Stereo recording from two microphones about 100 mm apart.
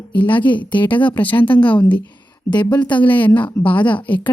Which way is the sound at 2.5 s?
50° left (ahead or behind).